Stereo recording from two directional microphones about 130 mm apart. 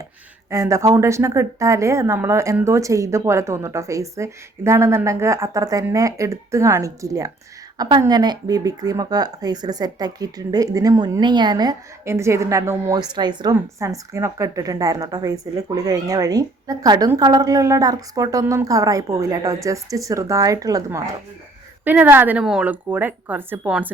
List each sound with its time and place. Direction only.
0.5 s a woman's voice: 25° right (ahead or behind)
12.0 s a woman's voice: 20° right (ahead or behind)
13.0 s speech: 35° right (ahead or behind)
13.7 s a woman's voice: 25° right (ahead or behind)
21.8 s speech: 15° right (ahead or behind)